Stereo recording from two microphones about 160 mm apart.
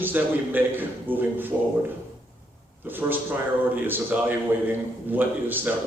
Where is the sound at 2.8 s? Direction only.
10° right (ahead or behind).